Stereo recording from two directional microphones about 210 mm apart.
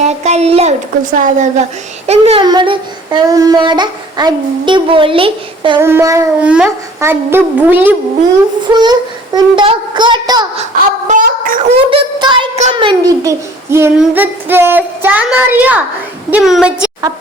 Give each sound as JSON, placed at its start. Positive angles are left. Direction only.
{"t": 0.2, "sound": "speech", "side_deg": -30}
{"t": 5.8, "sound": "a child's voice", "side_deg": -15}
{"t": 11.1, "sound": "speech", "side_deg": -40}
{"t": 11.8, "sound": "a child's voice", "side_deg": -25}